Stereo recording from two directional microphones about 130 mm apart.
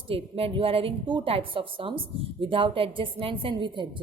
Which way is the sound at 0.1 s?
45° right (ahead or behind).